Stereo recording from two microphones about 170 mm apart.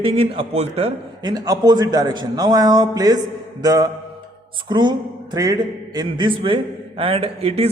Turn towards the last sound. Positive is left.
turn(degrees=-35)  # may be behind; listen again after turning